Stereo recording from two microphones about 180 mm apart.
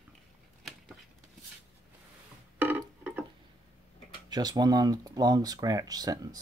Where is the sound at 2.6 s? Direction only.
10° right (ahead or behind).